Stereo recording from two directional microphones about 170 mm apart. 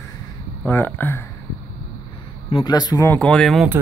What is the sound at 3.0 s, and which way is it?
Speech, 5° left (ahead or behind).